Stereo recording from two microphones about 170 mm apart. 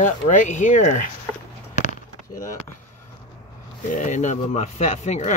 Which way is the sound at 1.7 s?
45° left (ahead or behind).